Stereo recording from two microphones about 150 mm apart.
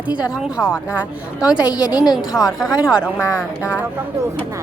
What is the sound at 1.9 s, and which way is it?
Speech, 25° left (ahead or behind).